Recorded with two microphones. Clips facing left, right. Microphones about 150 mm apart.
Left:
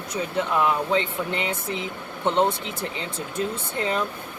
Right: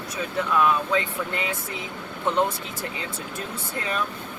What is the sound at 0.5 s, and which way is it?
Speech, 25° left (ahead or behind).